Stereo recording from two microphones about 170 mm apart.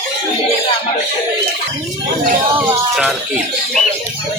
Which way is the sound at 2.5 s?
5° right (ahead or behind).